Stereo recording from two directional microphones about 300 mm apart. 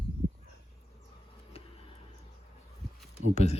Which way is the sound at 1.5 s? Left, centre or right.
Left.